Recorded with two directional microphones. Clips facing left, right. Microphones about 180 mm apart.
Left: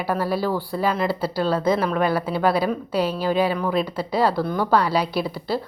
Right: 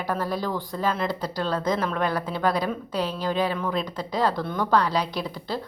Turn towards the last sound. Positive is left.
turn(degrees=10)  # may be behind; listen again after turning